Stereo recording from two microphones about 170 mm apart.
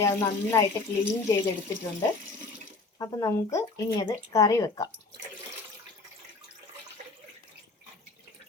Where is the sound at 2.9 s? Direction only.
20° left (ahead or behind).